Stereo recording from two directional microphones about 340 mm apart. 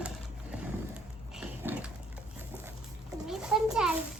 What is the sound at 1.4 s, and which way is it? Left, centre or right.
Pig, centre.